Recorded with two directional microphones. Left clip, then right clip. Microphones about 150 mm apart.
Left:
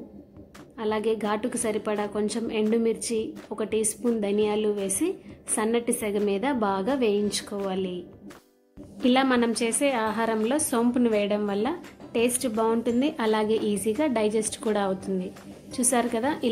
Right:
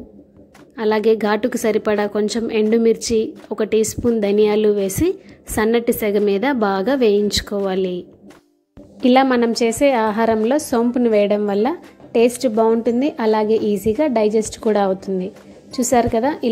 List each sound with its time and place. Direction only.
0.7 s a woman's voice: 35° right (ahead or behind)
9.0 s a woman's voice: 35° right (ahead or behind)